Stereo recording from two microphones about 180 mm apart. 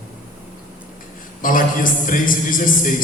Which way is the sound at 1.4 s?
50° left (ahead or behind).